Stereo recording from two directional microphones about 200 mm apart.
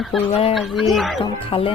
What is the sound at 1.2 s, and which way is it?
Speech, 25° left (ahead or behind).